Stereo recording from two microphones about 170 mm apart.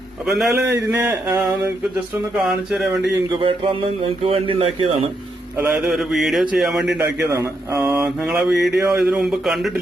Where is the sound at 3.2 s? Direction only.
30° right (ahead or behind).